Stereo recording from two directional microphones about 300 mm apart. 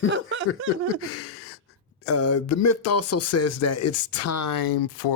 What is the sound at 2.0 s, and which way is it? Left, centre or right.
Speech, left.